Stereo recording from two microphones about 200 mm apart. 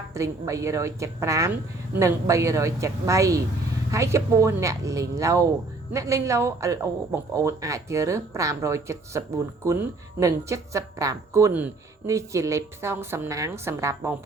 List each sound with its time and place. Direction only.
0.1 s speech: 15° right (ahead or behind)